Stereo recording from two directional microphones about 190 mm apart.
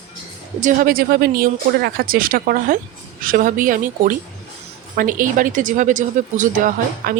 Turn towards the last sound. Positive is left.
turn(degrees=-45)  # may be behind; listen again after turning